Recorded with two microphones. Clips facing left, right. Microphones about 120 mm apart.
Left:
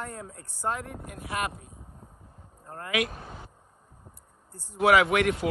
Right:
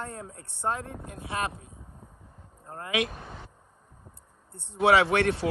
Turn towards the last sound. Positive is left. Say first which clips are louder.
# even
turn(degrees=-30)  # may be behind; listen again after turning